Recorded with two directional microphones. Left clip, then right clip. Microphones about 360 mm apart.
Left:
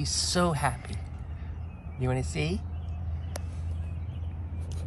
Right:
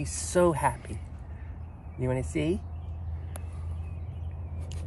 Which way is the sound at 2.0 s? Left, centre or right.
Centre.